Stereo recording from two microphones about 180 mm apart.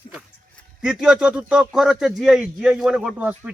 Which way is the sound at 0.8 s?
5° right (ahead or behind).